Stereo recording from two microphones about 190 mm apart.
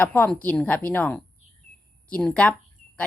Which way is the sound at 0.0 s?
10° left (ahead or behind).